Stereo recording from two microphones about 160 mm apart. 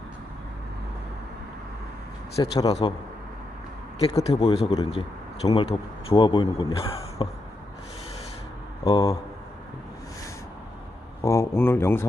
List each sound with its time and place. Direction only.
2.3 s speech: 25° left (ahead or behind)
4.2 s a man's voice: 40° left (ahead or behind)
8.8 s speech: 25° left (ahead or behind)
11.2 s speech: 20° left (ahead or behind)